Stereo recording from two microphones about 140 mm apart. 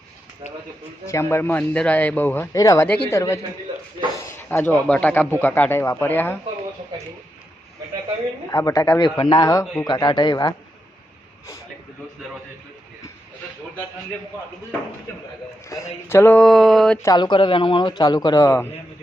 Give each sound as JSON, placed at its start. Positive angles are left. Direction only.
{"t": 1.0, "sound": "a man's voice", "side_deg": 20}
{"t": 4.4, "sound": "a man's voice", "side_deg": 10}
{"t": 8.4, "sound": "a man's voice", "side_deg": 25}
{"t": 15.7, "sound": "a man's voice", "side_deg": 20}
{"t": 17.2, "sound": "a man's voice", "side_deg": 35}